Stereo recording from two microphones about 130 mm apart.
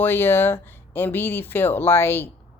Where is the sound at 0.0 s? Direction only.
15° left (ahead or behind).